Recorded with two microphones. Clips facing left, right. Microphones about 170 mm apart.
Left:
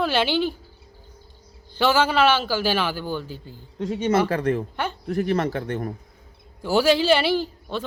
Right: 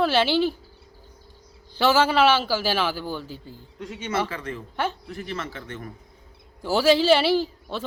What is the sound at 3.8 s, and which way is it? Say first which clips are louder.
Speech: left 9 dB; 35° left (ahead or behind).